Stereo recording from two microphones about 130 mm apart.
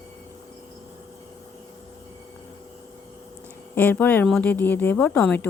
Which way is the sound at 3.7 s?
15° left (ahead or behind).